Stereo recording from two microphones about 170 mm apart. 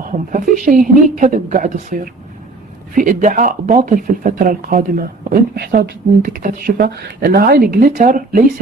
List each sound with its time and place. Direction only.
0.3 s speech: 50° right (ahead or behind)